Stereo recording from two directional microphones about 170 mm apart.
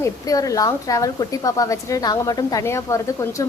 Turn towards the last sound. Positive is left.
turn(degrees=20)  # may be behind; listen again after turning